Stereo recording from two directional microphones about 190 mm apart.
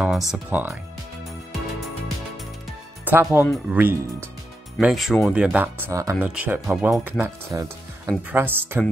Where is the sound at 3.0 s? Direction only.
10° right (ahead or behind).